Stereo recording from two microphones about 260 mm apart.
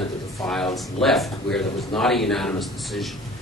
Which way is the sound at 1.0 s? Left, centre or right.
Centre.